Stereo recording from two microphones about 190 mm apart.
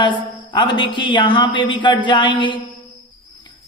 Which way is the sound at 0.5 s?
25° left (ahead or behind).